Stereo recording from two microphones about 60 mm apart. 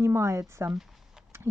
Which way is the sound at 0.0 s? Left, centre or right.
Right.